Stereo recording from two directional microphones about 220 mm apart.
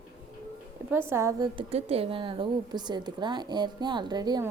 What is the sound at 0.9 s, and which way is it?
A woman's voice, 10° right (ahead or behind).